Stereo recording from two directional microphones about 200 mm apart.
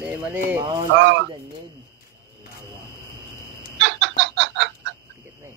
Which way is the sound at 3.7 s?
65° right (ahead or behind).